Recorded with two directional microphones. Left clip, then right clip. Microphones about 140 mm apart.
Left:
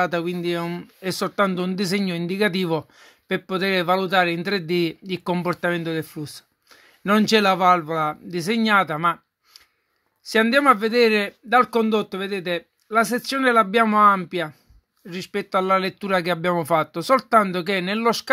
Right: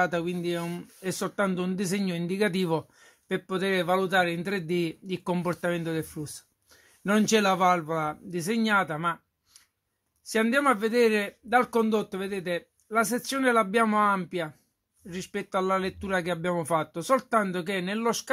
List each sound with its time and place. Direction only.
0.0 s speech: 20° left (ahead or behind)